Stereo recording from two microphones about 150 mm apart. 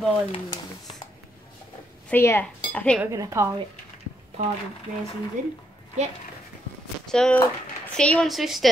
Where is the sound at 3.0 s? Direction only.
20° right (ahead or behind).